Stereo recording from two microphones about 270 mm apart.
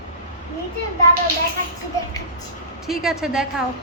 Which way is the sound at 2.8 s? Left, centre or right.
Centre.